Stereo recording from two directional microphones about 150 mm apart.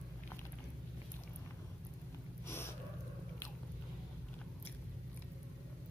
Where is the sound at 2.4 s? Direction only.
15° left (ahead or behind).